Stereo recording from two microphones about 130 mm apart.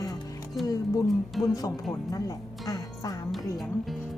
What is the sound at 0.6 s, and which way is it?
Music, 25° left (ahead or behind).